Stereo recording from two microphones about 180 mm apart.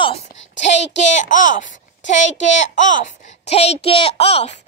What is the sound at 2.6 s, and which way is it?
A child's voice, 45° left (ahead or behind).